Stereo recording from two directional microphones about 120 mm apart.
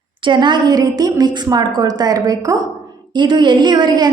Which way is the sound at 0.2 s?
40° right (ahead or behind).